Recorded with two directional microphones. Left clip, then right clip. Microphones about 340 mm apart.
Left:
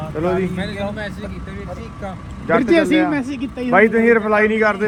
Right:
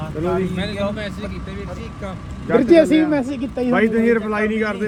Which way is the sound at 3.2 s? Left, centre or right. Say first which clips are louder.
Right 2 dB; centre.